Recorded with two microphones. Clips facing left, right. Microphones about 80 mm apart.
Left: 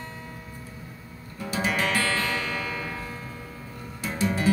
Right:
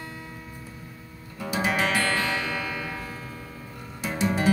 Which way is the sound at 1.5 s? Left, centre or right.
Centre.